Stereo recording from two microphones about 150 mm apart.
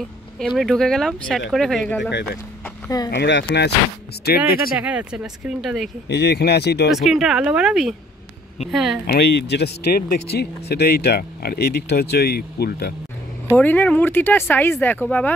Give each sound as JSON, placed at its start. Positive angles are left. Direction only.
{"t": 0.4, "sound": "speech", "side_deg": 0}
{"t": 2.9, "sound": "speech", "side_deg": 25}
{"t": 3.5, "sound": "speech", "side_deg": 90}
{"t": 4.7, "sound": "speech", "side_deg": -10}
{"t": 6.1, "sound": "speech", "side_deg": 90}
{"t": 6.9, "sound": "speech", "side_deg": 0}
{"t": 9.0, "sound": "speech", "side_deg": 90}
{"t": 13.6, "sound": "speech", "side_deg": 10}